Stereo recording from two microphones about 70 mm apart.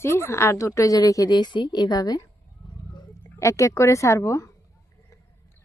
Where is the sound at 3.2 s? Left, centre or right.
Left.